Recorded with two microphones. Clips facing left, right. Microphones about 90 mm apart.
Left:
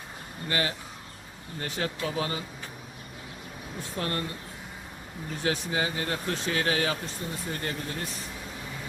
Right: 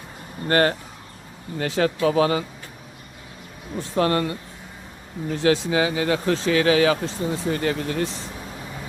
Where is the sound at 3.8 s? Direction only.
90° right.